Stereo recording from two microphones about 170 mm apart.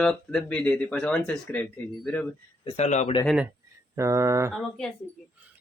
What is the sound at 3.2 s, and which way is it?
Speech, 5° right (ahead or behind).